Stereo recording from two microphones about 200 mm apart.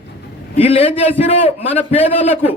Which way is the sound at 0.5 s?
30° left (ahead or behind).